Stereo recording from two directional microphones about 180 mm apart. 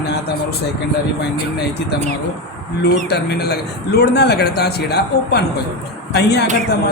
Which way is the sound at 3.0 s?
65° left (ahead or behind).